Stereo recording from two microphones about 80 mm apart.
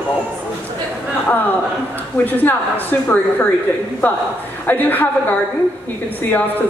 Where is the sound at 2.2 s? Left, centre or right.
Left.